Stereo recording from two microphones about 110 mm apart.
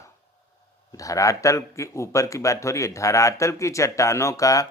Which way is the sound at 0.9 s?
30° left (ahead or behind).